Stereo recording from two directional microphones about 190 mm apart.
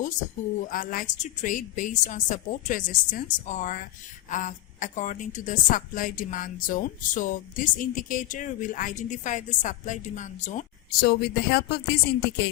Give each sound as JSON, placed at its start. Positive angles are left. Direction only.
{"t": 0.6, "sound": "a woman's voice", "side_deg": 45}